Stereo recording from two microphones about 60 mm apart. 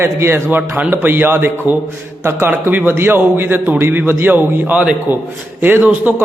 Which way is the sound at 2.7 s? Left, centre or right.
Right.